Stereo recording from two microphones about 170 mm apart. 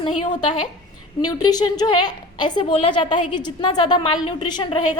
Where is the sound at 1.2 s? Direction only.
25° left (ahead or behind).